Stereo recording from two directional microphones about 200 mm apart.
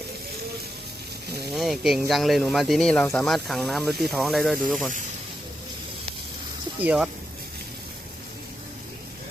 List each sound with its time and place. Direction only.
1.5 s speech: centre (ahead or behind)
6.8 s speech: 5° right (ahead or behind)